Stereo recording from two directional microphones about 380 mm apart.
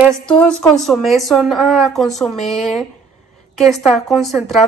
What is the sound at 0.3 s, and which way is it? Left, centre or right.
A woman's voice, centre.